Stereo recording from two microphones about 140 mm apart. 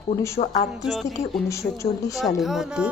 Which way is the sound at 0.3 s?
55° left (ahead or behind).